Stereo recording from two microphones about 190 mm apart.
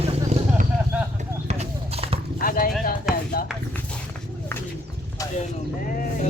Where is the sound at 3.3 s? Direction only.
50° left (ahead or behind).